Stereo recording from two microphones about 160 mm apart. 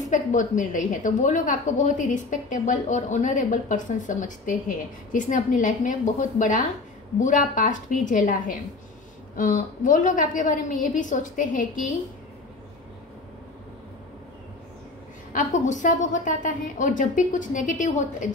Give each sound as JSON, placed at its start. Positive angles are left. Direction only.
{"t": 0.1, "sound": "a woman's voice", "side_deg": 55}
{"t": 15.3, "sound": "a woman's voice", "side_deg": 50}